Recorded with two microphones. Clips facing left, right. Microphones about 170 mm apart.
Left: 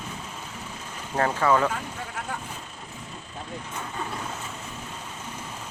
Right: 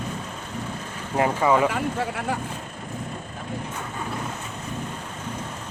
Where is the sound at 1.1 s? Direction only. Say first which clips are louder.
Right 2 dB; 15° right (ahead or behind).